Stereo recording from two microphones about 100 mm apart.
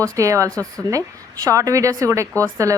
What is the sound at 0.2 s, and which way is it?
A woman's voice, 30° right (ahead or behind).